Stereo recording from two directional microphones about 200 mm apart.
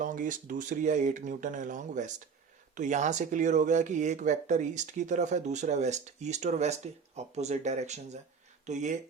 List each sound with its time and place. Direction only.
0.0 s speech: 40° right (ahead or behind)